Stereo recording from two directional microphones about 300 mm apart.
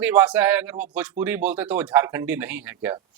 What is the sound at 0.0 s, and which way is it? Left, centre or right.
Speech, centre.